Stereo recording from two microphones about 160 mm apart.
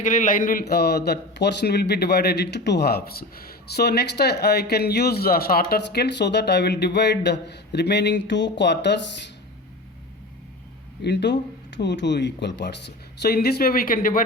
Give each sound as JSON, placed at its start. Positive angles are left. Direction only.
{"t": 0.0, "sound": "a man's voice", "side_deg": 55}
{"t": 11.0, "sound": "a man's voice", "side_deg": 90}